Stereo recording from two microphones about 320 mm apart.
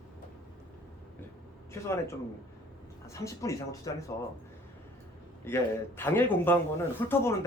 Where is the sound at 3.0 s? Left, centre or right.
Centre.